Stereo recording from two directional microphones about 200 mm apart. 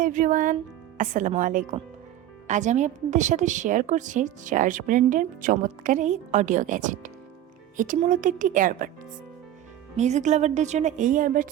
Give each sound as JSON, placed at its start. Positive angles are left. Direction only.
{"t": 0.0, "sound": "a woman's voice", "side_deg": -40}
{"t": 10.0, "sound": "a woman's voice", "side_deg": -35}